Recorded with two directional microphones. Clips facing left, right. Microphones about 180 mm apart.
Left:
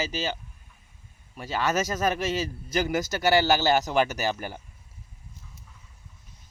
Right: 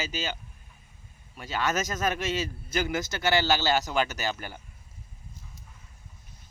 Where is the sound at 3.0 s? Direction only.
10° left (ahead or behind).